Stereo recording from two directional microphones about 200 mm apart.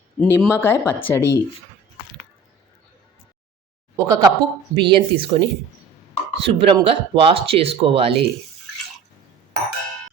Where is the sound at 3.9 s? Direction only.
15° right (ahead or behind).